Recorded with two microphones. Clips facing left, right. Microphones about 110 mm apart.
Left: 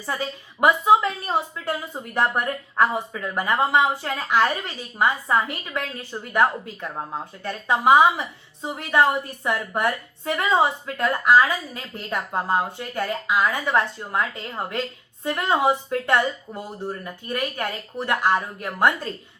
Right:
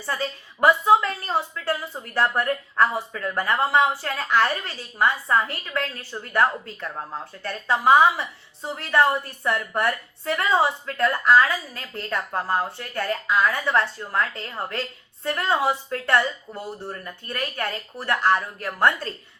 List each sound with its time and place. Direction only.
0.0 s a woman's voice: 15° left (ahead or behind)